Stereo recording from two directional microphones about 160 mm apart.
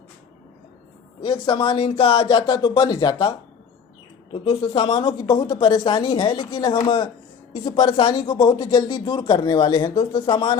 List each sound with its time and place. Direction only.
1.2 s speech: 30° left (ahead or behind)